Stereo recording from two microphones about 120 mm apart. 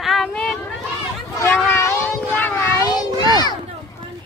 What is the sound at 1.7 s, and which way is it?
Cat, 20° left (ahead or behind).